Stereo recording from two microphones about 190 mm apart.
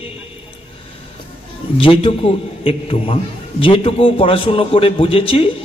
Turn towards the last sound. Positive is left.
turn(degrees=30)  # may be behind; listen again after turning